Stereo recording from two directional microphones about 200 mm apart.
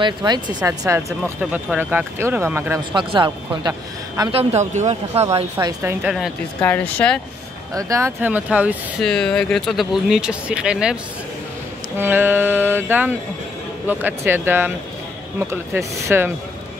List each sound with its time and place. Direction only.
0.0 s speech: 20° right (ahead or behind)
2.9 s speech: 25° right (ahead or behind)
5.3 s speech: 20° right (ahead or behind)
6.1 s speech: 5° left (ahead or behind)
7.7 s speech: 15° right (ahead or behind)
9.0 s speech: 5° left (ahead or behind)
12.0 s speech: 10° right (ahead or behind)